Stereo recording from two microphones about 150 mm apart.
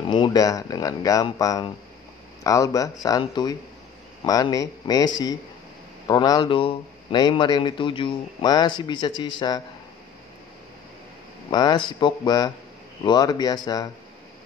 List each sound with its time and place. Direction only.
0.1 s speech: 30° left (ahead or behind)
11.5 s speech: 30° left (ahead or behind)